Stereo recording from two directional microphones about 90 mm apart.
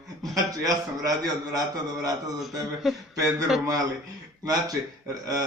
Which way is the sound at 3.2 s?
40° right (ahead or behind).